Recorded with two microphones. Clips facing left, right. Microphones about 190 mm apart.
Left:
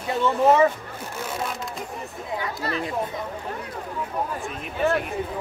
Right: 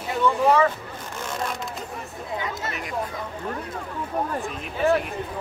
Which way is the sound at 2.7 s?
30° left (ahead or behind).